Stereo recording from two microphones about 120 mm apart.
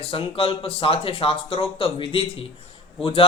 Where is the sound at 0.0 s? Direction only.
50° left (ahead or behind).